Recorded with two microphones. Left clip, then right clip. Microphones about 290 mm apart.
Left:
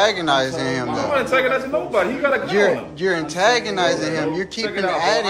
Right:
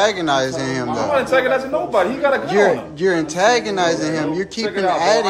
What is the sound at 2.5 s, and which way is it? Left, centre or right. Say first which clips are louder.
Speech: right 2 dB; centre.